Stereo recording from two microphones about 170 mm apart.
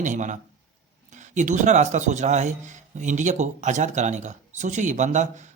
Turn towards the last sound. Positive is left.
turn(degrees=-45)  # may be behind; listen again after turning